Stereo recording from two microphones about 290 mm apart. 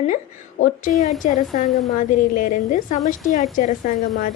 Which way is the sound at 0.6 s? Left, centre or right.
Left.